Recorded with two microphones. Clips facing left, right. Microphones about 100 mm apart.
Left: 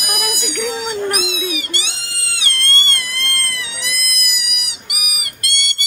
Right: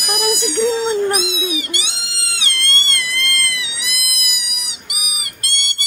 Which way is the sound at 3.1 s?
30° left (ahead or behind).